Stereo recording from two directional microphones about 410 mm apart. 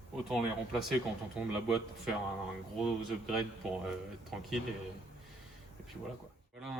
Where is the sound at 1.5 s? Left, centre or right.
Centre.